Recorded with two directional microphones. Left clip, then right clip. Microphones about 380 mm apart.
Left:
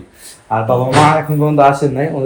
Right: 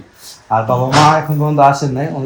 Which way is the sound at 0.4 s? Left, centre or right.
Centre.